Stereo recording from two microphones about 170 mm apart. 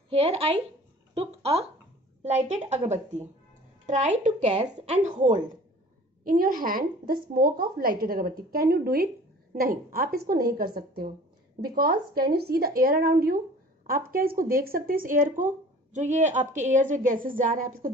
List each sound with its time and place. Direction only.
0.1 s a woman's voice: 35° right (ahead or behind)
6.2 s speech: 55° right (ahead or behind)